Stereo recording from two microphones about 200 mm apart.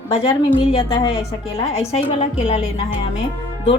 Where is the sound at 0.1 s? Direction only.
30° left (ahead or behind).